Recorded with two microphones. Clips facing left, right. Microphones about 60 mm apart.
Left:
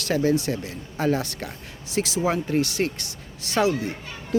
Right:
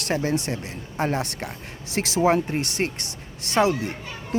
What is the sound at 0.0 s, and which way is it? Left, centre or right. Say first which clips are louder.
A child's voice: left 3 dB; right.